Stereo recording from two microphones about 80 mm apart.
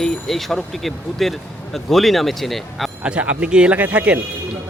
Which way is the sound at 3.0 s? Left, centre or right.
Centre.